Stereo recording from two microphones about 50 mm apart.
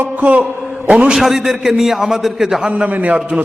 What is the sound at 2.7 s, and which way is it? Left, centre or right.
Speech, right.